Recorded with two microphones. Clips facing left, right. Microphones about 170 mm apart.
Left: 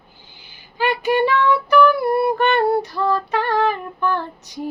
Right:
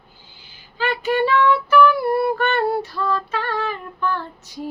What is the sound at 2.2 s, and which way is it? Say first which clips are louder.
Female singing: left 2 dB; 20° left (ahead or behind).